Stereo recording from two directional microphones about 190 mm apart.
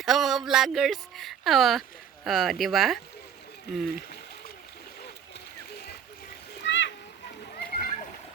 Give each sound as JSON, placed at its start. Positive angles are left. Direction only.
{"t": 0.0, "sound": "a sound", "side_deg": 0}
{"t": 2.2, "sound": "speech", "side_deg": 0}
{"t": 6.6, "sound": "splash", "side_deg": 65}
{"t": 7.6, "sound": "splash", "side_deg": 50}